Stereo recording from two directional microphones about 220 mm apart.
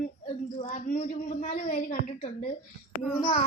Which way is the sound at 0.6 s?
35° left (ahead or behind).